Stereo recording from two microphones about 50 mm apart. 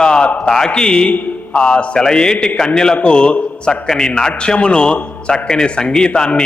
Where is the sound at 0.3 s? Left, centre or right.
Centre.